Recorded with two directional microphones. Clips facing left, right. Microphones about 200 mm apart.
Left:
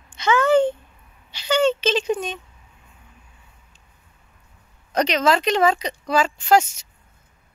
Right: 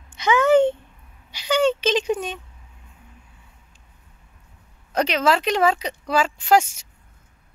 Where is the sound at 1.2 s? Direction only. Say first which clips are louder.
Even; 10° right (ahead or behind).